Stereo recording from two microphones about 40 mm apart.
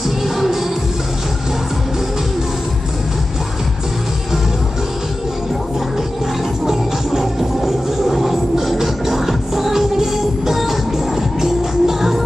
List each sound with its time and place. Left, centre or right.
7.1 s music: centre